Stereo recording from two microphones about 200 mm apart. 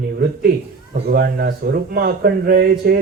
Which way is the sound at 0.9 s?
50° right (ahead or behind).